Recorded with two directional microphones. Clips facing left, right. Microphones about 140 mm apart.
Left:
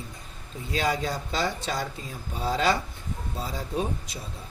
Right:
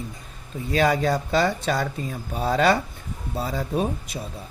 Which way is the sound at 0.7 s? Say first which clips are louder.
Right 7 dB; 60° right (ahead or behind).